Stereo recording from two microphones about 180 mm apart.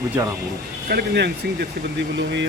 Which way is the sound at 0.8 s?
65° right (ahead or behind).